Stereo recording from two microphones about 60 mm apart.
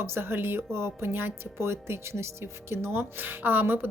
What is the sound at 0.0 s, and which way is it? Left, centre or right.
Speech, right.